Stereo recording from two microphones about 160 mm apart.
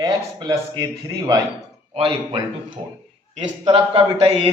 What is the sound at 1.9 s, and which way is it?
A man's voice, 30° right (ahead or behind).